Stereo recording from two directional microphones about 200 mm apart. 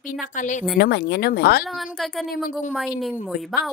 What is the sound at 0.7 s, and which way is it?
Speech, 55° left (ahead or behind).